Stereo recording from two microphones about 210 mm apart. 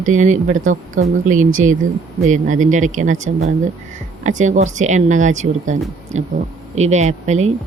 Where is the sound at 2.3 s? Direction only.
35° right (ahead or behind).